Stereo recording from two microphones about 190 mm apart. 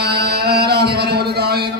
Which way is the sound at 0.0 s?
55° right (ahead or behind).